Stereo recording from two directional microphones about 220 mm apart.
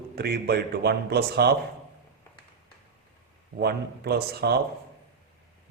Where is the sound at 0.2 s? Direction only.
45° right (ahead or behind).